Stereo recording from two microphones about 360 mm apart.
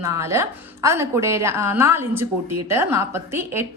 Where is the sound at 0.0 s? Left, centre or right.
Centre.